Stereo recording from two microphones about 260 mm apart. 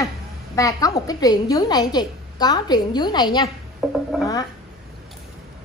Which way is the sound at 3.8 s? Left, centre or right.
Centre.